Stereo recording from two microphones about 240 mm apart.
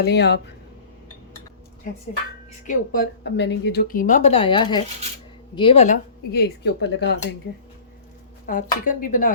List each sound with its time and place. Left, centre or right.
0.0 s speech: left
2.6 s speech: left
6.3 s speech: left
8.4 s speech: left